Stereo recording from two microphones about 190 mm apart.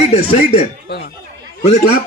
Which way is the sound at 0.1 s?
35° left (ahead or behind).